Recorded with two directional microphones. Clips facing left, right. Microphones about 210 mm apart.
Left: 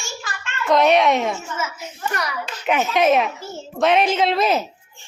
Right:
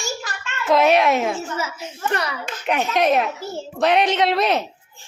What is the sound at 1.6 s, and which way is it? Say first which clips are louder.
Speech: right 1 dB; 30° right (ahead or behind).